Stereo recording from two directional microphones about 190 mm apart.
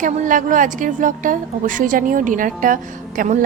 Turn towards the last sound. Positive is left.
turn(degrees=-45)  # may be behind; listen again after turning